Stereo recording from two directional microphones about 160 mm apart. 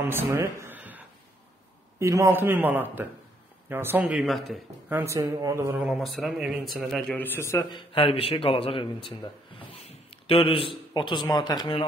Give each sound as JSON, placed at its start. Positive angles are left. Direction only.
{"t": 0.1, "sound": "a sound", "side_deg": -15}
{"t": 2.0, "sound": "a man's voice", "side_deg": -20}
{"t": 4.8, "sound": "a man's voice", "side_deg": -15}
{"t": 5.8, "sound": "a man's voice", "side_deg": 0}
{"t": 7.7, "sound": "speech", "side_deg": 35}
{"t": 9.8, "sound": "a sound", "side_deg": 35}
{"t": 10.9, "sound": "speech", "side_deg": 30}